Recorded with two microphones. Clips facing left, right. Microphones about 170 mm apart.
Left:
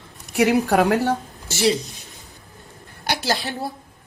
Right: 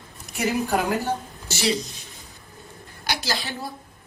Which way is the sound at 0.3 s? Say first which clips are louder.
Left 6 dB; 70° left (ahead or behind).